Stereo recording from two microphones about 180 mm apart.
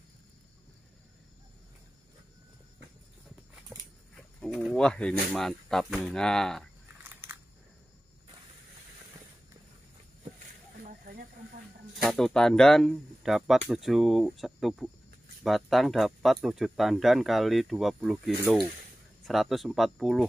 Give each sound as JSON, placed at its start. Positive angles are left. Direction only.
{"t": 3.7, "sound": "a sound", "side_deg": -5}
{"t": 4.4, "sound": "speech", "side_deg": 0}
{"t": 7.0, "sound": "biting", "side_deg": -10}
{"t": 10.8, "sound": "snake", "side_deg": -50}
{"t": 12.0, "sound": "speech", "side_deg": 0}